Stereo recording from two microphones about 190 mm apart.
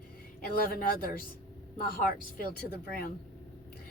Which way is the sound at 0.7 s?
50° left (ahead or behind).